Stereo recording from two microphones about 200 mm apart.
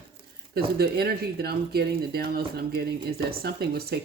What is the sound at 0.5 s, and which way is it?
Speech, 50° right (ahead or behind).